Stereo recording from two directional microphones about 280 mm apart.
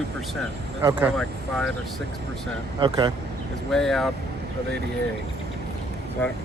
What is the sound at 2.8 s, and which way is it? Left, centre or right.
Speech, centre.